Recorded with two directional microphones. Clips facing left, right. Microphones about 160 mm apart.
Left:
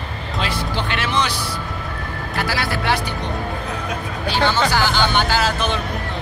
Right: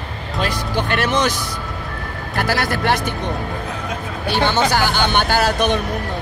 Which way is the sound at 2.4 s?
50° right (ahead or behind).